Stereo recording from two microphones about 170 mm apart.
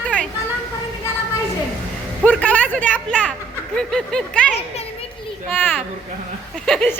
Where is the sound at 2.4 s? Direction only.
10° left (ahead or behind).